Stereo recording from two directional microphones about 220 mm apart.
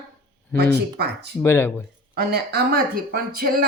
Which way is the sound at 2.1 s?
45° right (ahead or behind).